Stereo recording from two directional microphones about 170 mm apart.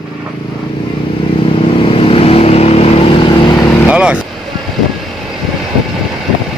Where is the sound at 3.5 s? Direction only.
20° left (ahead or behind).